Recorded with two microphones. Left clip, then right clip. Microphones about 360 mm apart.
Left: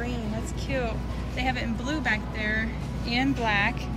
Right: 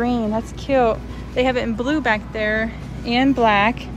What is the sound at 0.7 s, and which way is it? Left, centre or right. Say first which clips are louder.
Speech: right 14 dB; centre.